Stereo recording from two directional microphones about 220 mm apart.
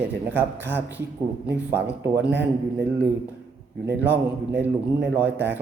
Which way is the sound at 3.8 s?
10° right (ahead or behind).